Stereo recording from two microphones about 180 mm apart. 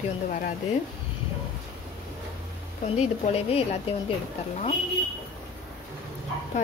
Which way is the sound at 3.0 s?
35° left (ahead or behind).